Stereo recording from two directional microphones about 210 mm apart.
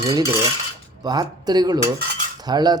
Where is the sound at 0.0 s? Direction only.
15° right (ahead or behind).